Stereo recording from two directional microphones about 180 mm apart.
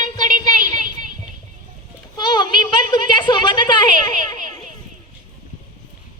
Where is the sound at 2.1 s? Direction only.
25° left (ahead or behind).